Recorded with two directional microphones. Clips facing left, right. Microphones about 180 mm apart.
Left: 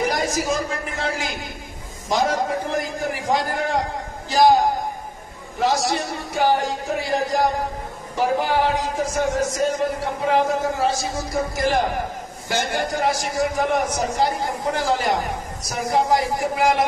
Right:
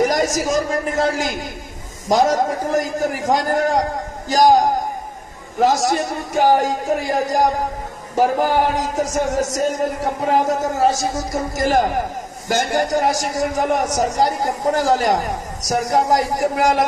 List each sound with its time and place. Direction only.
0.0 s a man's voice: 45° right (ahead or behind)